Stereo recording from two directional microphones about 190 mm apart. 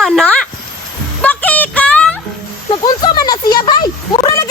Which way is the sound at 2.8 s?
20° left (ahead or behind).